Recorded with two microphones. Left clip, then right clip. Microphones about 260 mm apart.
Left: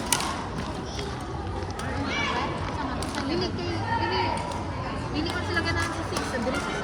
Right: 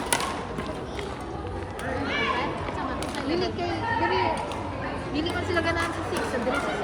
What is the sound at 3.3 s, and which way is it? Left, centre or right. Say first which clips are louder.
Children playing: right 5 dB; centre.